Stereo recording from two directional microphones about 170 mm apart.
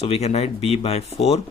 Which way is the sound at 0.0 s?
40° left (ahead or behind).